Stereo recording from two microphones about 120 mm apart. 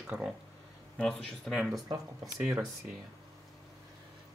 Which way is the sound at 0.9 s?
5° left (ahead or behind).